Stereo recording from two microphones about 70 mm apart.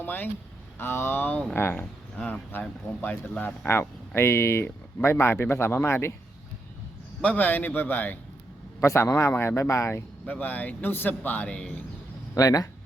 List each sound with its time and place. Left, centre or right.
0.0 s speech: left
1.8 s speech: centre
2.5 s a man's voice: left
3.7 s speech: left
7.2 s a man's voice: left
8.8 s a man's voice: left
10.2 s a man's voice: left
12.3 s speech: left